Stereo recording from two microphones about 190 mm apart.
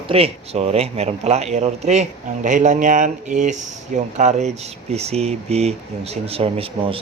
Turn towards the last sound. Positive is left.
turn(degrees=-30)  # may be behind; listen again after turning